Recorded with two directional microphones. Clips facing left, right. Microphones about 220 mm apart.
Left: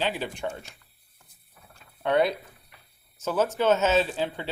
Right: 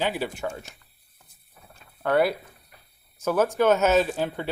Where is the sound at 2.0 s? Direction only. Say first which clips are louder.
Right 1 dB; 5° right (ahead or behind).